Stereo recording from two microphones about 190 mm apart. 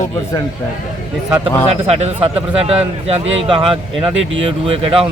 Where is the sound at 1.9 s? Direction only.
35° right (ahead or behind).